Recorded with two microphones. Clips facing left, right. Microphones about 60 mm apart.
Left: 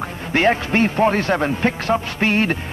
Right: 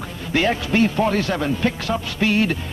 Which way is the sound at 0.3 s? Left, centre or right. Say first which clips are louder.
Left 2 dB; left.